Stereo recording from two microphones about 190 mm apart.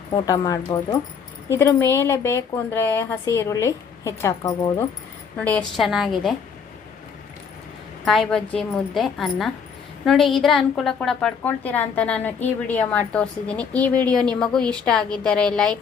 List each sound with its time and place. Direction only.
0.1 s a woman's voice: 20° left (ahead or behind); by 6.3 s centre (ahead or behind)
8.0 s a woman's voice: centre (ahead or behind)